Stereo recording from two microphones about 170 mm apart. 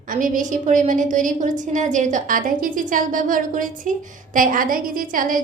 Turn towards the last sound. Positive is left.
turn(degrees=-55)  # may be behind; listen again after turning